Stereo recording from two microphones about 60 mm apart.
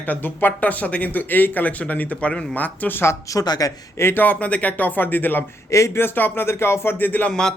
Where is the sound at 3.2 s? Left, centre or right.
Left.